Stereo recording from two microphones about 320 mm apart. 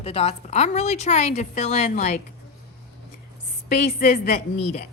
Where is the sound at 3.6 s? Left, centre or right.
Left.